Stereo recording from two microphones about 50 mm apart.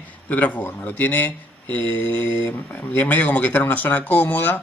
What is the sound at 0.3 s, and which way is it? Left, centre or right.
Speech, left.